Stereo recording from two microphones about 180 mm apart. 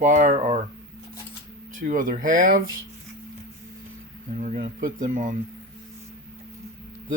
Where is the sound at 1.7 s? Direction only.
45° right (ahead or behind).